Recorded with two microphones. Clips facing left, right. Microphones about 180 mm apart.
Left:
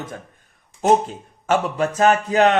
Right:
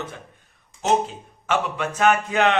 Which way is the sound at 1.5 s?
40° left (ahead or behind).